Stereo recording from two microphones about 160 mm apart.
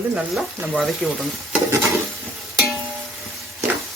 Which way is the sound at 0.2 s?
5° right (ahead or behind).